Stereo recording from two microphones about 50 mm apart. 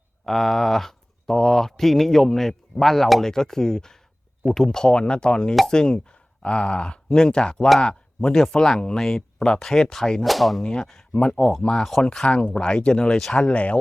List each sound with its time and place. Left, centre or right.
0.3 s speech: centre
8.4 s speech: centre
10.2 s speech: centre
10.6 s speech: centre